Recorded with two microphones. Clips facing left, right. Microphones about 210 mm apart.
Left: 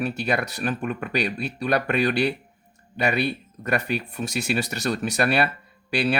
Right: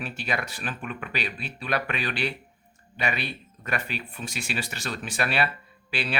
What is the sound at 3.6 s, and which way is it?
Speech, 45° left (ahead or behind).